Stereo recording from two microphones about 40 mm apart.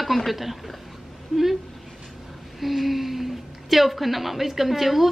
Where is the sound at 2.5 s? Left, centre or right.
Centre.